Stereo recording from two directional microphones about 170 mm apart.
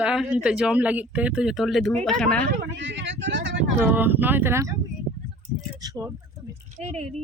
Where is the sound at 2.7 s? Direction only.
90° right.